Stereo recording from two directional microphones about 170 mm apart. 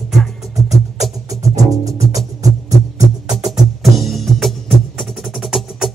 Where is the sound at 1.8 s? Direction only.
20° right (ahead or behind).